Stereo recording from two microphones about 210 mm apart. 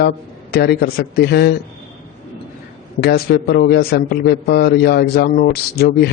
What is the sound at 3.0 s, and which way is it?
A man's voice, 50° left (ahead or behind).